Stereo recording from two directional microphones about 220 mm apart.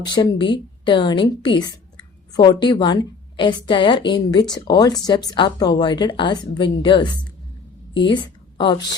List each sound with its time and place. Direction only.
0.0 s a woman's voice: 20° left (ahead or behind)